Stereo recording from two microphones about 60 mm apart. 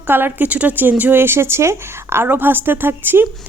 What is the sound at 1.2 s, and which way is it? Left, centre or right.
A woman's voice, right.